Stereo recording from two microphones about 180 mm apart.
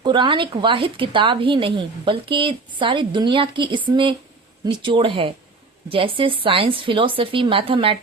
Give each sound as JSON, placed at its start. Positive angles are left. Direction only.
{"t": 0.0, "sound": "speech", "side_deg": -25}